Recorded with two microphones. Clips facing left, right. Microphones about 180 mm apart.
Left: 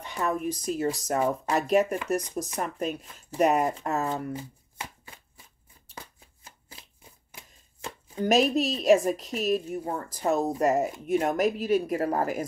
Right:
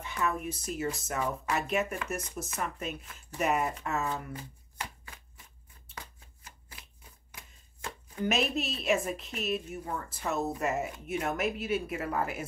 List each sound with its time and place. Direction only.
0.0 s a woman's voice: 35° left (ahead or behind)
6.4 s shuffling cards: 25° left (ahead or behind)
8.1 s a woman's voice: 35° left (ahead or behind)